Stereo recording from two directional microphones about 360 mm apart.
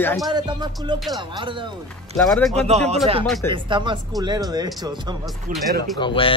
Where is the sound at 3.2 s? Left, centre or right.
Centre.